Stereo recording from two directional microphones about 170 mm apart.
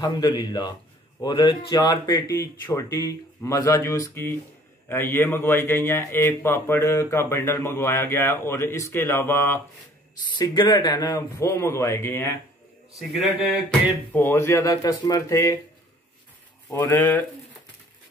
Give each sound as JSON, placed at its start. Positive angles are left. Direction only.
{"t": 0.0, "sound": "a man's voice", "side_deg": 25}
{"t": 10.3, "sound": "a man's voice", "side_deg": 25}
{"t": 13.1, "sound": "a sound", "side_deg": 0}
{"t": 14.1, "sound": "a man's voice", "side_deg": 15}
{"t": 16.7, "sound": "a man's voice", "side_deg": 10}